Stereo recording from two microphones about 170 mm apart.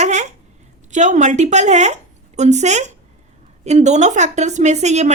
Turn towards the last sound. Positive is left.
turn(degrees=-40)  # may be behind; listen again after turning